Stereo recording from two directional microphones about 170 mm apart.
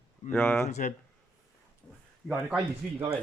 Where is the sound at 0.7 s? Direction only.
45° left (ahead or behind).